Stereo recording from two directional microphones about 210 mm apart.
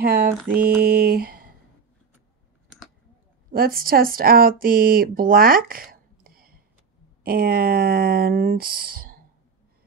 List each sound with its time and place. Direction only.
0.0 s mantra: 45° right (ahead or behind)
0.8 s speech: 45° right (ahead or behind)
3.5 s speech: 45° right (ahead or behind)